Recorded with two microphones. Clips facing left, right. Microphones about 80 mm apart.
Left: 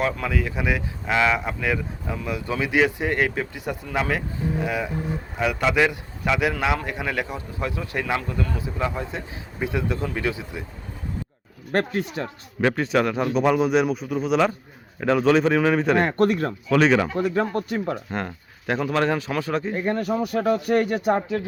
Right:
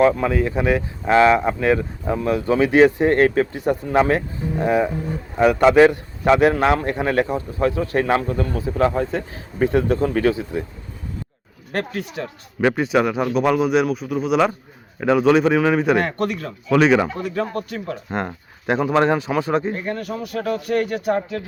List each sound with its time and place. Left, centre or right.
0.0 s a man's voice: right
11.7 s speech: left
12.6 s a man's voice: centre
16.0 s speech: left
16.6 s a man's voice: centre
17.2 s speech: left
18.1 s speech: right
19.7 s speech: left